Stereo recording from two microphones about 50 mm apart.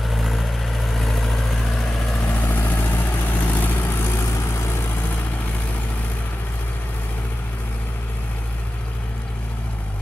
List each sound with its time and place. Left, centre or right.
0.1 s vehicle: centre
2.2 s vehicle: left